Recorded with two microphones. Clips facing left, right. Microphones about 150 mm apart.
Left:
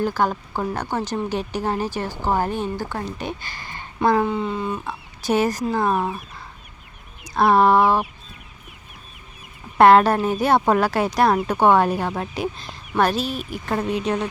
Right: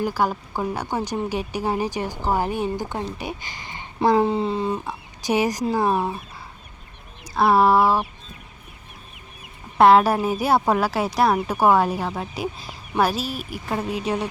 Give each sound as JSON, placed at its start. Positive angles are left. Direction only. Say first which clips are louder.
{"t": 0.0, "sound": "a woman's voice", "louder": "left 1 dB", "side_deg": -10}
{"t": 4.3, "sound": "speech", "louder": "right 2 dB", "side_deg": -30}
{"t": 4.9, "sound": "a woman's voice", "louder": "left 1 dB", "side_deg": -15}
{"t": 7.3, "sound": "speech", "louder": "left 1 dB", "side_deg": -5}
{"t": 9.7, "sound": "a woman's voice", "louder": "left 1 dB", "side_deg": 0}